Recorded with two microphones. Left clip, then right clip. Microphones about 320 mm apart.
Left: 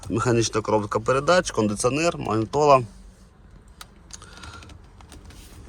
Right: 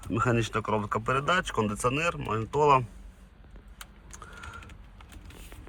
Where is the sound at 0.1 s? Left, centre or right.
Centre.